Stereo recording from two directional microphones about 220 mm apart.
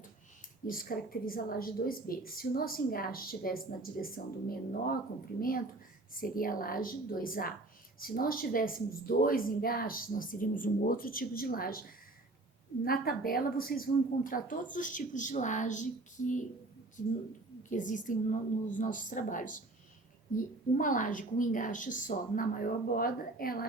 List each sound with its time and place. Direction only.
0.7 s speech: 40° left (ahead or behind)